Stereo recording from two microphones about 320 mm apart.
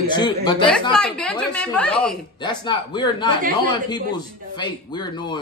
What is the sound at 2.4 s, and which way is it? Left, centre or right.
Speech, centre.